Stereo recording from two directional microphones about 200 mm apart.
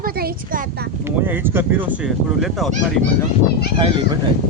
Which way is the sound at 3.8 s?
25° right (ahead or behind).